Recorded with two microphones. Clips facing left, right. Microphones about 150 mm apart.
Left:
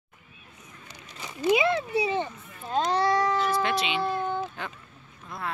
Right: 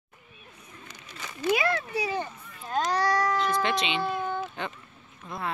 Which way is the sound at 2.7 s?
25° left (ahead or behind).